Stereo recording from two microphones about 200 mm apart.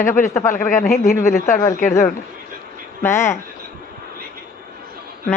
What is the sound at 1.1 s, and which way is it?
Speech, 15° left (ahead or behind).